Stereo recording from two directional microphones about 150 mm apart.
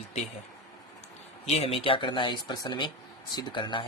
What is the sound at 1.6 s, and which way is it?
Speech, 40° left (ahead or behind).